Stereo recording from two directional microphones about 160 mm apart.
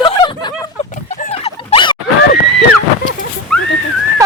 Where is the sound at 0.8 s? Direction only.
45° left (ahead or behind).